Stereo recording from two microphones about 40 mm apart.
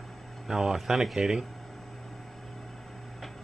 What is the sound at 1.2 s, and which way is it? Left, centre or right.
Speech, right.